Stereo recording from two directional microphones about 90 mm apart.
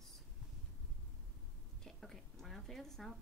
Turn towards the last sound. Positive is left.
turn(degrees=5)  # may be behind; listen again after turning